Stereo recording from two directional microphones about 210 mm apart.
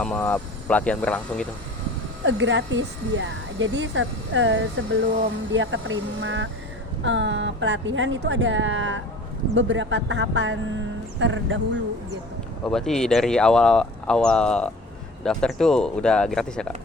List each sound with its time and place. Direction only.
0.0 s speech: 5° left (ahead or behind)
2.2 s a woman's voice: 60° right (ahead or behind)
12.6 s speech: centre (ahead or behind)